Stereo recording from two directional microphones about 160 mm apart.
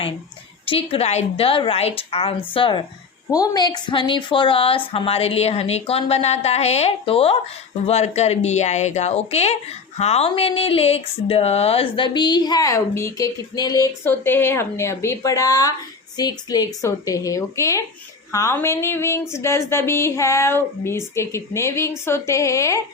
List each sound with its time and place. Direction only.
0.6 s a woman's voice: 35° left (ahead or behind); by 22.8 s 20° left (ahead or behind)